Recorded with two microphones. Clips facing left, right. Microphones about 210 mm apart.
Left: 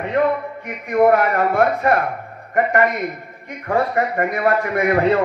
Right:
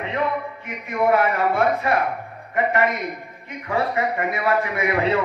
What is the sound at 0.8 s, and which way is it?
A man's voice, 45° left (ahead or behind).